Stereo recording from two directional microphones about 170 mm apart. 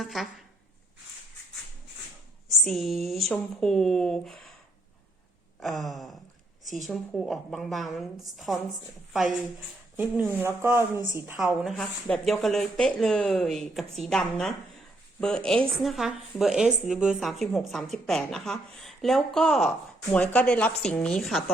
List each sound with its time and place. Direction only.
0.0 s a woman's voice: centre (ahead or behind)
2.6 s a woman's voice: centre (ahead or behind)
5.5 s a woman's voice: centre (ahead or behind)
10.0 s a woman's voice: 10° right (ahead or behind)